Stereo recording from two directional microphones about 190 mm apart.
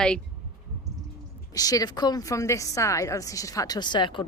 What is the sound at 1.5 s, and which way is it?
A woman's voice, 20° left (ahead or behind).